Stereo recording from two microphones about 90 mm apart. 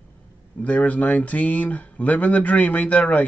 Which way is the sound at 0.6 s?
15° left (ahead or behind).